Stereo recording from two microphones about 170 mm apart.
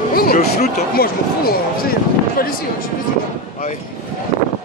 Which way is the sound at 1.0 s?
60° left (ahead or behind).